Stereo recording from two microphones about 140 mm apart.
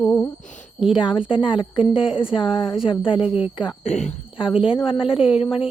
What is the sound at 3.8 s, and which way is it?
Speech, 55° left (ahead or behind).